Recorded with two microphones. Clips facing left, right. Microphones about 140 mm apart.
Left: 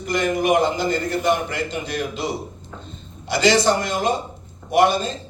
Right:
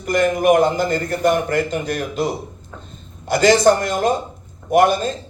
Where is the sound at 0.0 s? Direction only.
50° right (ahead or behind).